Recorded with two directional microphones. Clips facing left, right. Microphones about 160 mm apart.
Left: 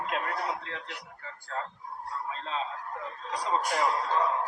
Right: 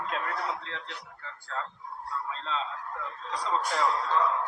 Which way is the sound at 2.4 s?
15° left (ahead or behind).